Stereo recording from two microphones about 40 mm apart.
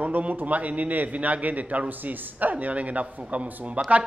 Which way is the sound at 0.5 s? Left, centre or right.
Right.